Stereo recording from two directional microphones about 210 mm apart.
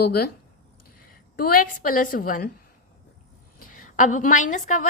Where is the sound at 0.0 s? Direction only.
50° left (ahead or behind).